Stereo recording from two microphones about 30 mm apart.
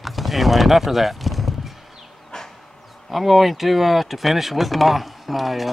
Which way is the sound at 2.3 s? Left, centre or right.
Left.